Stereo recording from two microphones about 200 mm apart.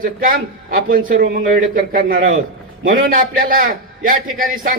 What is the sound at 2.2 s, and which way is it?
Speech, 75° right (ahead or behind).